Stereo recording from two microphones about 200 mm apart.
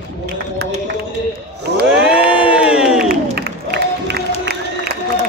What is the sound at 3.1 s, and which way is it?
Crowd, 50° right (ahead or behind).